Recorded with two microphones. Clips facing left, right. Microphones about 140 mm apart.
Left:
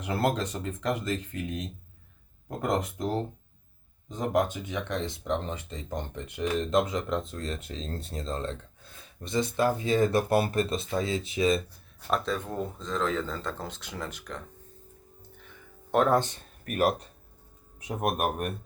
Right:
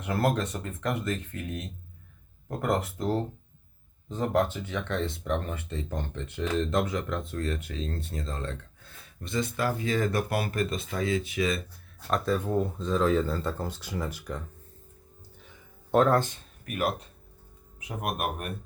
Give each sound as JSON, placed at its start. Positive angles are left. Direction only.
{"t": 0.0, "sound": "speech", "side_deg": 15}
{"t": 4.1, "sound": "speech", "side_deg": 15}
{"t": 12.2, "sound": "speech", "side_deg": -5}
{"t": 15.9, "sound": "speech", "side_deg": 0}
{"t": 16.3, "sound": "speech", "side_deg": 40}